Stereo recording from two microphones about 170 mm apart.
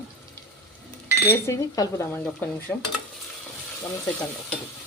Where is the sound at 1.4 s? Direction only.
15° left (ahead or behind).